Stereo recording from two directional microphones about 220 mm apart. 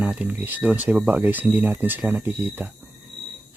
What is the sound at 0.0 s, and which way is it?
Speech, 5° right (ahead or behind).